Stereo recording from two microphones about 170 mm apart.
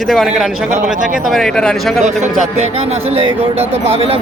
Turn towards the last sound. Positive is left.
turn(degrees=-35)  # may be behind; listen again after turning